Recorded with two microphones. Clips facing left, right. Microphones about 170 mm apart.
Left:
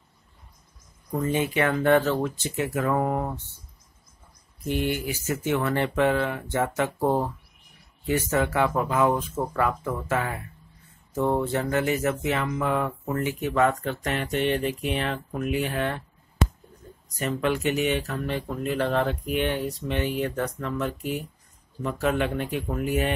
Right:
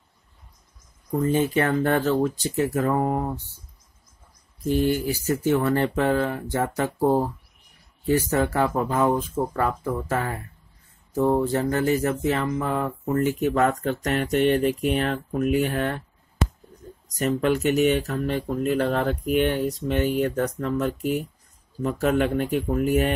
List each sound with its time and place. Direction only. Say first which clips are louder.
1.2 s speech: right 3 dB; 35° right (ahead or behind)
4.6 s speech: right 5 dB; 35° right (ahead or behind)
8.1 s speech: right 3 dB; 35° right (ahead or behind)
11.4 s speech: right 3 dB; 35° right (ahead or behind)
17.2 s speech: right 4 dB; 40° right (ahead or behind)